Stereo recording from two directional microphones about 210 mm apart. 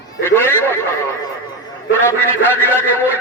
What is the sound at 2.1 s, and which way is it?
Speech, 10° left (ahead or behind).